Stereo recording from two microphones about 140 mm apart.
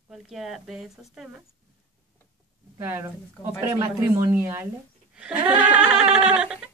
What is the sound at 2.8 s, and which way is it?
Speech, 15° right (ahead or behind).